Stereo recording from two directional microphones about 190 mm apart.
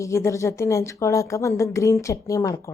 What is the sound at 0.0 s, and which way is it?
A woman's voice, 15° left (ahead or behind).